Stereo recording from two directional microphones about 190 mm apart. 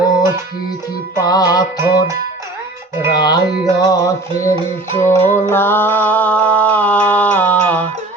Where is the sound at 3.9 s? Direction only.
15° left (ahead or behind).